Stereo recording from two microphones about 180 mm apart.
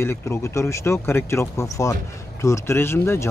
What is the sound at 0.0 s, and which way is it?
Speech, 15° left (ahead or behind).